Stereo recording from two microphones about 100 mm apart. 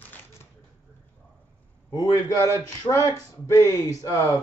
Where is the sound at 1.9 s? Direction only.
35° left (ahead or behind).